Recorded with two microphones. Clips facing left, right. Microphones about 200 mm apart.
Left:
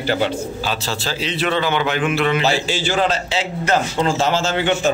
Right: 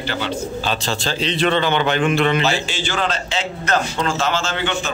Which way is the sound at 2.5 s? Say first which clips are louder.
Left 2 dB; 35° left (ahead or behind).